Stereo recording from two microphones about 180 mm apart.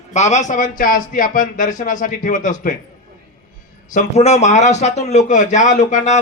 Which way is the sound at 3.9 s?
40° left (ahead or behind).